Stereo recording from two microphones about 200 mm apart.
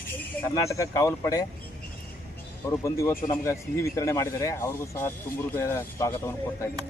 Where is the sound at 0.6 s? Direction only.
15° left (ahead or behind).